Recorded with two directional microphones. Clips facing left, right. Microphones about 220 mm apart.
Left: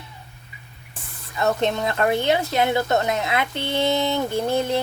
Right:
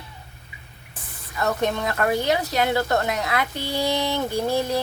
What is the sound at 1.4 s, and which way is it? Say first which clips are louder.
A woman's voice: left 2 dB; 20° left (ahead or behind).